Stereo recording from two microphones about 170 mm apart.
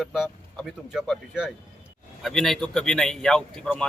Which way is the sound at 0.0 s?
Centre (ahead or behind).